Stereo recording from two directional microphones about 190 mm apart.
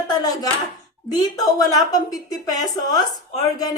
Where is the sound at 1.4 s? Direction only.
20° left (ahead or behind).